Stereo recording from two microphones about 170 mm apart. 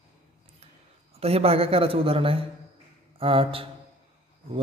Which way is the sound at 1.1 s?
35° right (ahead or behind).